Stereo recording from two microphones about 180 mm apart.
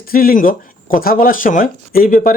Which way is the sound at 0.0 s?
55° left (ahead or behind).